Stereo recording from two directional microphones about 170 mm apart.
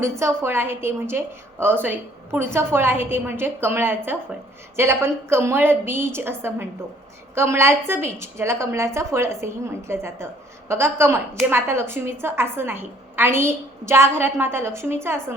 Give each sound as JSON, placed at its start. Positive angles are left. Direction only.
{"t": 0.0, "sound": "a woman's voice", "side_deg": -15}